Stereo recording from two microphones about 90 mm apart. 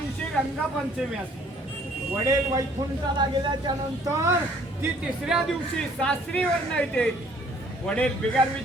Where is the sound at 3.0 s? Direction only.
50° right (ahead or behind).